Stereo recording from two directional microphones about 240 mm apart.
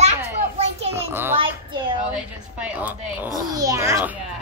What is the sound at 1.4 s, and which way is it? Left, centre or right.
Speech, right.